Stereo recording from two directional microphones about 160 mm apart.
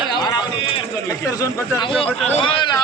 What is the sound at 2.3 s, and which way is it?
Speech, 30° left (ahead or behind).